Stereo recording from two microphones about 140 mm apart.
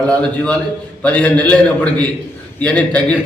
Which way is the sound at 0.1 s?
10° left (ahead or behind).